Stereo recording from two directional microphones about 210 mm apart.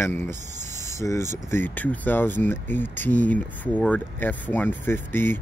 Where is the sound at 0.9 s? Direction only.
15° left (ahead or behind).